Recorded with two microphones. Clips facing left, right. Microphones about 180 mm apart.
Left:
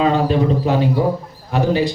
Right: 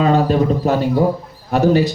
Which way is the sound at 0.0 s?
45° right (ahead or behind).